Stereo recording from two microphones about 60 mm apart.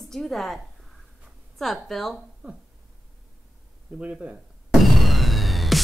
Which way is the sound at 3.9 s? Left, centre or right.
Right.